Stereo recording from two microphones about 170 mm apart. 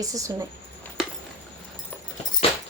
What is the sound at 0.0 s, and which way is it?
Speech, 20° right (ahead or behind).